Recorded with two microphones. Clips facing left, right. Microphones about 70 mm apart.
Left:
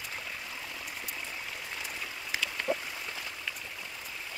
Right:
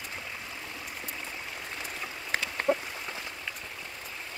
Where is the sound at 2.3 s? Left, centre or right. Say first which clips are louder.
Right 3 dB; right.